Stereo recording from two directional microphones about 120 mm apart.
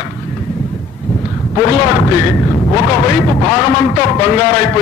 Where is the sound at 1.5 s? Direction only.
30° left (ahead or behind).